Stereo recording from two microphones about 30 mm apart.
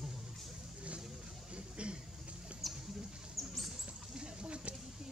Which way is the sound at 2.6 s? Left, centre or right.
Centre.